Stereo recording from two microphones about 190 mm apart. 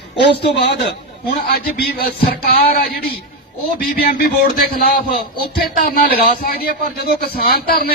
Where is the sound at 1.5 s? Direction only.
55° left (ahead or behind).